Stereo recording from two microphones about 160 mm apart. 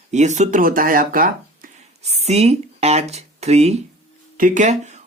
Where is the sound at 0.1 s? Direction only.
45° right (ahead or behind).